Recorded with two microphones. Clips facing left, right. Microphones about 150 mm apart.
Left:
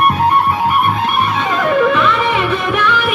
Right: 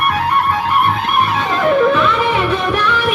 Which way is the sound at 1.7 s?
Centre (ahead or behind).